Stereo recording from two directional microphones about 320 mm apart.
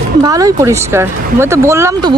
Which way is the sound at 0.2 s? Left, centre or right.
Centre.